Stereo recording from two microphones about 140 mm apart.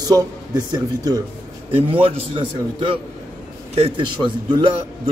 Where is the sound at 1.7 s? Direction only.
40° right (ahead or behind).